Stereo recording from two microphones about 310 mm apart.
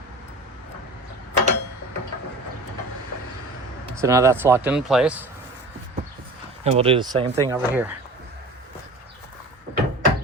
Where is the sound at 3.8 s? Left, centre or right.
Centre.